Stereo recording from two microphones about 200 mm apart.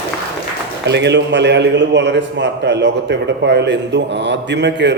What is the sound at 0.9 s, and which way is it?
A man's voice, 60° right (ahead or behind).